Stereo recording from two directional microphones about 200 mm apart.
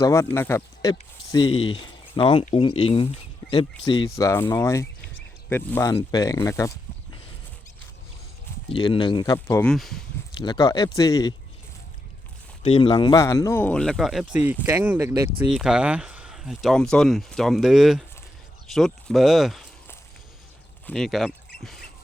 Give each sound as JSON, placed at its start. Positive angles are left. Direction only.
{"t": 0.0, "sound": "speech", "side_deg": 15}
{"t": 8.7, "sound": "speech", "side_deg": 25}
{"t": 9.7, "sound": "speech", "side_deg": 0}
{"t": 10.4, "sound": "speech", "side_deg": 20}
{"t": 12.6, "sound": "speech", "side_deg": 25}
{"t": 20.8, "sound": "speech", "side_deg": 0}
{"t": 21.6, "sound": "a sound", "side_deg": 0}